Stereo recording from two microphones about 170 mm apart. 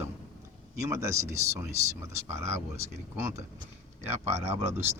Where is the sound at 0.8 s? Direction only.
15° right (ahead or behind).